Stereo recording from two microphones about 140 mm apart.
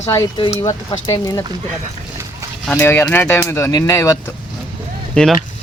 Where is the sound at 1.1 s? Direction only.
25° left (ahead or behind).